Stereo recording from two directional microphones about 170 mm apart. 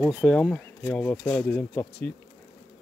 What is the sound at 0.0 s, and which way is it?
Speech, 5° right (ahead or behind).